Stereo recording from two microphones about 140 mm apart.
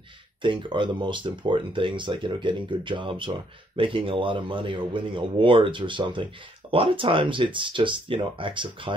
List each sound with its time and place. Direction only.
0.4 s speech: 35° right (ahead or behind)